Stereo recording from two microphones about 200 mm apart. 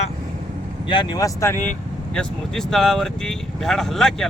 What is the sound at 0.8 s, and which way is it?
Speech, 20° left (ahead or behind).